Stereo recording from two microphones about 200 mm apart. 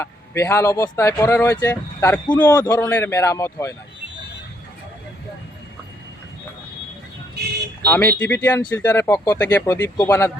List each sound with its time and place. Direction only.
0.0 s speech: 15° left (ahead or behind)
7.9 s speech: 10° left (ahead or behind)